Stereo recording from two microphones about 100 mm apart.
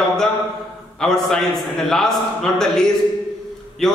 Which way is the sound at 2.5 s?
5° left (ahead or behind).